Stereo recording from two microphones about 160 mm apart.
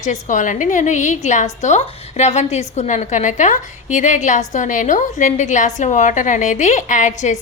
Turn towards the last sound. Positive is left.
turn(degrees=50)  # may be behind; listen again after turning